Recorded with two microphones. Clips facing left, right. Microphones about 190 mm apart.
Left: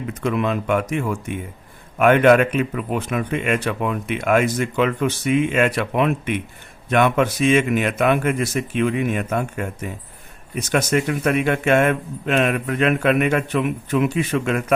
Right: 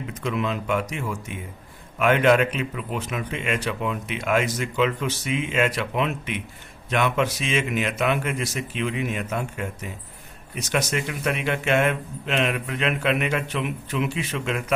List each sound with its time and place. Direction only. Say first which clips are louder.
0.1 s speech: left 5 dB; 55° left (ahead or behind)